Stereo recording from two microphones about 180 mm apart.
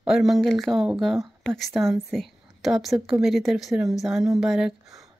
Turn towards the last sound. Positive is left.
turn(degrees=0)  # may be behind; listen again after turning